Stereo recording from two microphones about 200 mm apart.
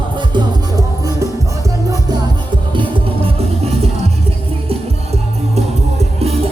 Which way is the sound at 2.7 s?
30° right (ahead or behind).